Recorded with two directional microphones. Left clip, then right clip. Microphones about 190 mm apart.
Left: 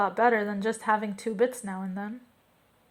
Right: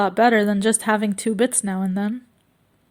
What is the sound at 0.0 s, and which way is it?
A woman's voice, 50° right (ahead or behind).